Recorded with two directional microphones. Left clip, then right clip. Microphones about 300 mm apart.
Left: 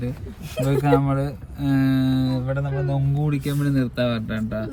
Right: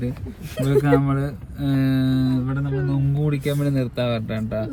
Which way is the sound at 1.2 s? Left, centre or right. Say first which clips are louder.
Left 1 dB; centre.